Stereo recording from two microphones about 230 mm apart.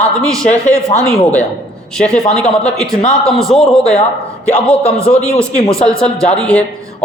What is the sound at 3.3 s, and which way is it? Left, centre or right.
Speech, centre.